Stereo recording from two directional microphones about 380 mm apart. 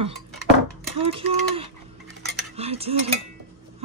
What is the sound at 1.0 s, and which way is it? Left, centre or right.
Speech, centre.